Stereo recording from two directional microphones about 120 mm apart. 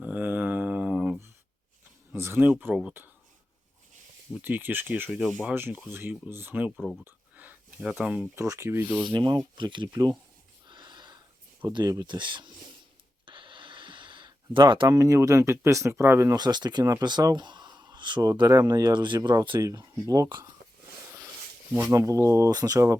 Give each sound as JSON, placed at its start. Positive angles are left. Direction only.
{"t": 0.0, "sound": "a sound", "side_deg": -15}
{"t": 2.1, "sound": "speech", "side_deg": -20}
{"t": 4.4, "sound": "speech", "side_deg": -15}
{"t": 6.7, "sound": "speech", "side_deg": 5}
{"t": 7.0, "sound": "speech", "side_deg": -15}
{"t": 8.4, "sound": "speech", "side_deg": -20}
{"t": 9.1, "sound": "speech", "side_deg": -40}
{"t": 10.7, "sound": "sniff", "side_deg": -40}
{"t": 11.7, "sound": "speech", "side_deg": -35}
{"t": 13.2, "sound": "a sound", "side_deg": -45}
{"t": 14.9, "sound": "speech", "side_deg": -30}
{"t": 16.4, "sound": "speech", "side_deg": -35}
{"t": 19.5, "sound": "speech", "side_deg": -30}
{"t": 21.7, "sound": "speech", "side_deg": -15}